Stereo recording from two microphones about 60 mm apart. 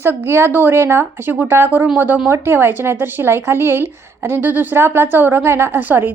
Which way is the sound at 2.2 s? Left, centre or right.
Right.